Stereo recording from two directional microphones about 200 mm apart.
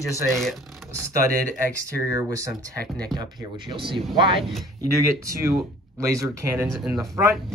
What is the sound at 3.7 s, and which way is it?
Speech, 25° right (ahead or behind).